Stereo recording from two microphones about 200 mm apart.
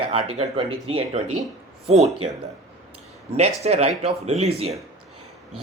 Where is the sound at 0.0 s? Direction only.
25° right (ahead or behind).